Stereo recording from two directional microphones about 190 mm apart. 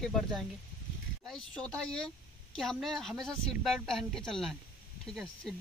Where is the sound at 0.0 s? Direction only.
Centre (ahead or behind).